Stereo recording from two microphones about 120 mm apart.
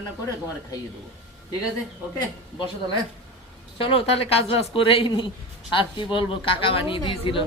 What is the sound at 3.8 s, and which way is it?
A woman's voice, 50° left (ahead or behind).